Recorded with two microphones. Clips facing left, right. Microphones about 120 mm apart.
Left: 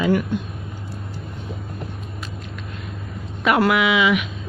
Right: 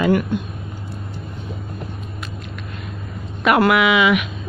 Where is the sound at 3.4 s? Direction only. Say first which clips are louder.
Right 3 dB; 60° right (ahead or behind).